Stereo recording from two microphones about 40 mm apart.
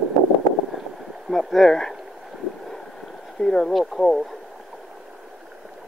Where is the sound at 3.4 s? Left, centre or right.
Centre.